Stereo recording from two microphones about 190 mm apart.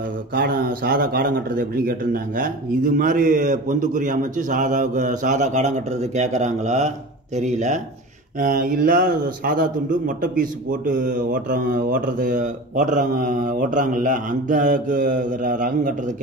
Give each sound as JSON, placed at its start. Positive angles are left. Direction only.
{"t": 0.3, "sound": "a man's voice", "side_deg": -50}